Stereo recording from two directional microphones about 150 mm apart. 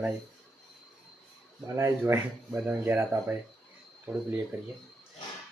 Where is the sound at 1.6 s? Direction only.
20° right (ahead or behind).